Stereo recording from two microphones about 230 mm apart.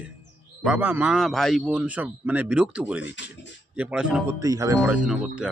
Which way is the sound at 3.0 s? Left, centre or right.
Left.